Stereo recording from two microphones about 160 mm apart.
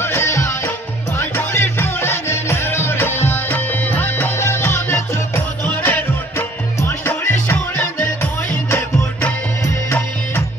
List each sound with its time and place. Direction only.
0.0 s music: 15° left (ahead or behind)